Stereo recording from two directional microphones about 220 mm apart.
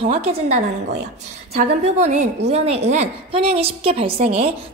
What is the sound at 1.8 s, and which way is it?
A woman's voice, 30° right (ahead or behind).